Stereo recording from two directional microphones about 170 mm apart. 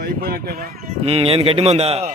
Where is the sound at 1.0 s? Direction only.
35° right (ahead or behind).